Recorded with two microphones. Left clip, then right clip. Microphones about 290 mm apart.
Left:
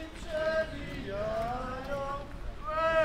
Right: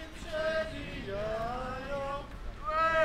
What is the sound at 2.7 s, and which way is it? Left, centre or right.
Boat, centre.